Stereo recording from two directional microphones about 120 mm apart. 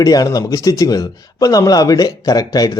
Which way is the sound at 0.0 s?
30° left (ahead or behind).